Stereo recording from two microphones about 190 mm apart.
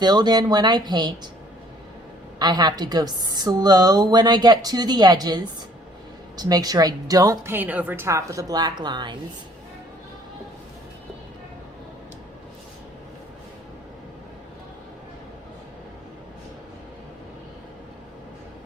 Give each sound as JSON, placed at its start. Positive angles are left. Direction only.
{"t": 0.0, "sound": "a woman's voice", "side_deg": -20}
{"t": 2.4, "sound": "a woman's voice", "side_deg": -20}